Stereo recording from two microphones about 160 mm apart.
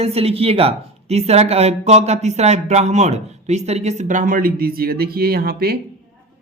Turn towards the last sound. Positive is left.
turn(degrees=-70)  # may be behind; listen again after turning